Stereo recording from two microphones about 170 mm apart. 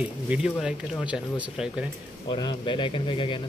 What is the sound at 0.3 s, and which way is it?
Speech, 5° right (ahead or behind).